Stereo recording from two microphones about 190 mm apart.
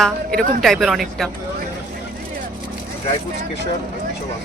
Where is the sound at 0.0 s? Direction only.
Centre (ahead or behind).